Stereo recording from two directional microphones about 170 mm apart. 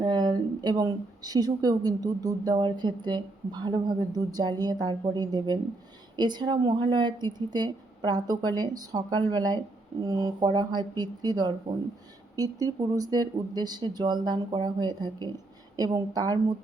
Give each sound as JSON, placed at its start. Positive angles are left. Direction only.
{"t": 0.0, "sound": "speech", "side_deg": -25}